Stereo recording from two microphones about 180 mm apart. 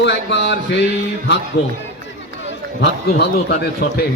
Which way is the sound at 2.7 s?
70° left (ahead or behind).